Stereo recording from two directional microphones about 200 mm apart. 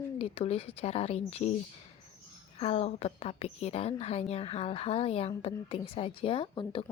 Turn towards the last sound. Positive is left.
turn(degrees=25)  # may be behind; listen again after turning